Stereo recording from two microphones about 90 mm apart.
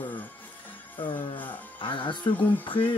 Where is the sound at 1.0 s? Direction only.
70° left (ahead or behind).